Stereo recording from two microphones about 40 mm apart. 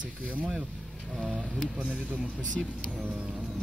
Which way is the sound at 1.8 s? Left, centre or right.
Right.